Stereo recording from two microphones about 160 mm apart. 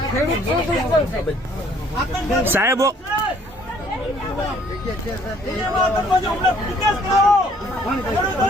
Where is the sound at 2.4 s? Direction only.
15° right (ahead or behind).